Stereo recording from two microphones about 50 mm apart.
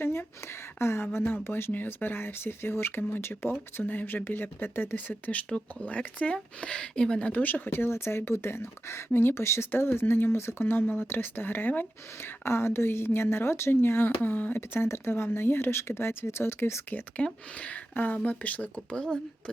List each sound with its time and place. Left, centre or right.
0.0 s a sound: left
0.8 s speech: left
1.7 s speech: left
3.8 s speech: left
7.4 s speech: left
14.2 s speech: left
17.2 s speech: left
17.9 s speech: left
18.9 s speech: centre